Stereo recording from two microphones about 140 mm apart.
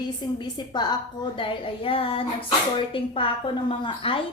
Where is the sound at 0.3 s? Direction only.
30° left (ahead or behind).